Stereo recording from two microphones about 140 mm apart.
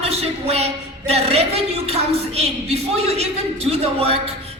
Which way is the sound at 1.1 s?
50° right (ahead or behind).